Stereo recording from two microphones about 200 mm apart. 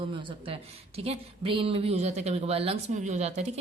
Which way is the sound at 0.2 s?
25° right (ahead or behind).